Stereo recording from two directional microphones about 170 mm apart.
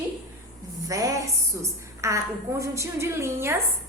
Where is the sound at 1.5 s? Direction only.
15° right (ahead or behind).